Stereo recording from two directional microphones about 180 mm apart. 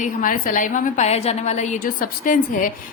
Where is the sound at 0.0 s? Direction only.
50° left (ahead or behind).